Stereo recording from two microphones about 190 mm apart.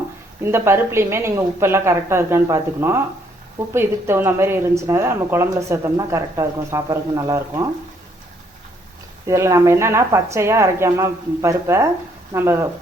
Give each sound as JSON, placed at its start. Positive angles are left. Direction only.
{"t": 0.4, "sound": "speech", "side_deg": -15}
{"t": 9.2, "sound": "speech", "side_deg": -15}